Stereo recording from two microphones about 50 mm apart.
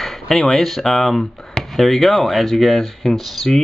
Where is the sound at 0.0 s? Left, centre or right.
Centre.